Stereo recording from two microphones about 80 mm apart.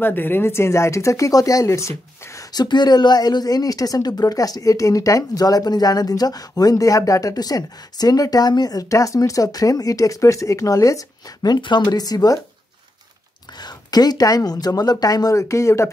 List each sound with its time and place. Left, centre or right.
0.0 s speech: left
2.5 s speech: left
13.6 s speech: left